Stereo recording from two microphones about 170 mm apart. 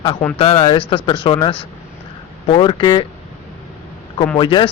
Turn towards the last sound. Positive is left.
turn(degrees=30)  # may be behind; listen again after turning